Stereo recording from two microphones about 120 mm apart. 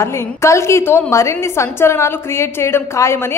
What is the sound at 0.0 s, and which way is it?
A woman's voice, 25° left (ahead or behind).